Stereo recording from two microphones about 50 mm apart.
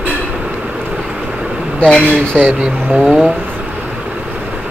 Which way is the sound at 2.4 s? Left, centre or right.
Centre.